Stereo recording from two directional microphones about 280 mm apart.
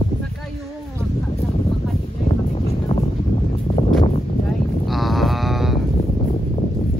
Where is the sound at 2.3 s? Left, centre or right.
Left.